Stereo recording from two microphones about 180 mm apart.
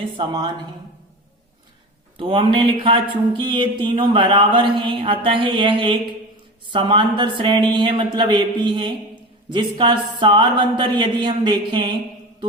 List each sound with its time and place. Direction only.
0.2 s speech: 25° right (ahead or behind)
2.1 s speech: 30° right (ahead or behind)